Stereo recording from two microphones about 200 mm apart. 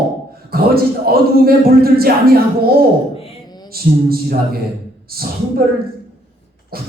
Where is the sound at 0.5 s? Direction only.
50° right (ahead or behind).